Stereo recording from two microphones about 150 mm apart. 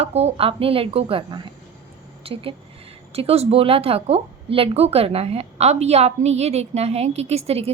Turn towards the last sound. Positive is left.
turn(degrees=-40)  # may be behind; listen again after turning